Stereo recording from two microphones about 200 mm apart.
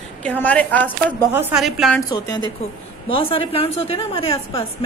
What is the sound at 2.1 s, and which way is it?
A woman's voice, 20° left (ahead or behind).